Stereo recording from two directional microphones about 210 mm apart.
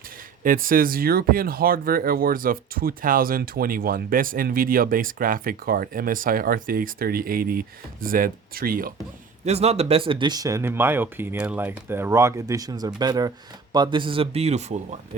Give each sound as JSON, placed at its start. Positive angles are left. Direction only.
{"t": 0.4, "sound": "speech", "side_deg": -40}
{"t": 9.4, "sound": "speech", "side_deg": -30}